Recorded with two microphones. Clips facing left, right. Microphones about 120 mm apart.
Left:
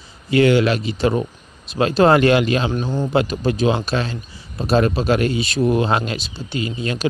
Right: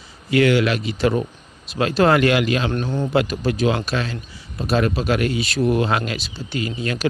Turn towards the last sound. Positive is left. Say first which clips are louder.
# left 1 dB
turn(degrees=25)  # may be behind; listen again after turning